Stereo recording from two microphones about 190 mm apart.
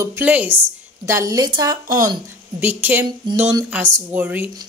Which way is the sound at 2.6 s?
10° right (ahead or behind).